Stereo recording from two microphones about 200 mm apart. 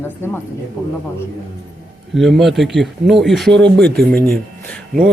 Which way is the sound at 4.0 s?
10° left (ahead or behind).